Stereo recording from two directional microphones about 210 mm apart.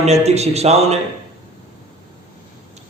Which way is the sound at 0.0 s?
30° right (ahead or behind).